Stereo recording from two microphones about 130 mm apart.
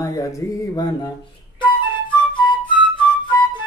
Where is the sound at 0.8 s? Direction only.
30° left (ahead or behind).